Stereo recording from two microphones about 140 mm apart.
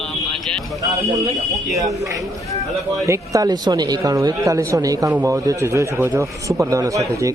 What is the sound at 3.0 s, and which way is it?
Speech, 20° right (ahead or behind).